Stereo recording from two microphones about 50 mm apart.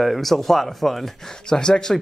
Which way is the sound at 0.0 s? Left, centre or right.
Centre.